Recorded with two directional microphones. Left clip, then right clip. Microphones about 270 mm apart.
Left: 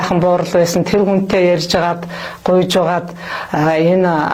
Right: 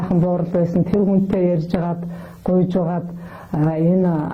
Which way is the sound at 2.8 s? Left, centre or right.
Centre.